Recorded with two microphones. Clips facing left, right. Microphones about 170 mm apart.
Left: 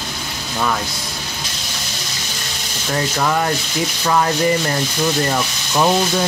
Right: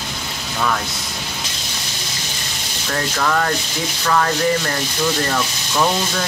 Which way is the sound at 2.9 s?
15° left (ahead or behind).